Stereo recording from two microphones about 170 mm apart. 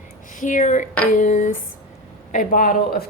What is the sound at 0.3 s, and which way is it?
A woman's voice, 50° left (ahead or behind).